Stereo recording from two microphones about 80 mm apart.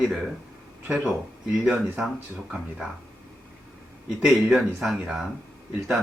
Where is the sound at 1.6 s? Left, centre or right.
Centre.